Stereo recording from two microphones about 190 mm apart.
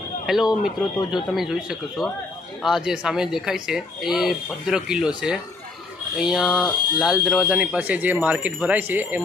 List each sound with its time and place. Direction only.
0.3 s speech: centre (ahead or behind)